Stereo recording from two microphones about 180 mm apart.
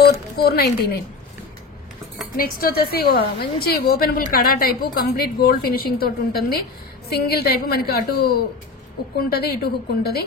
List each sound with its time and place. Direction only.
0.4 s a woman's voice: 60° left (ahead or behind)
2.3 s a woman's voice: 55° left (ahead or behind)